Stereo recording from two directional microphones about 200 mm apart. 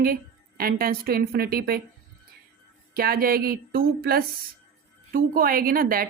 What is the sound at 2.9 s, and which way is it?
A woman's voice, 50° right (ahead or behind).